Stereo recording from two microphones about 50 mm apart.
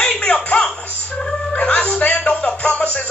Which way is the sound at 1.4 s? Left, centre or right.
Centre.